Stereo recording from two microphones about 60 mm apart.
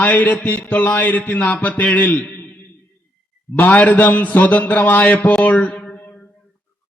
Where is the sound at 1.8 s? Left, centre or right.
Left.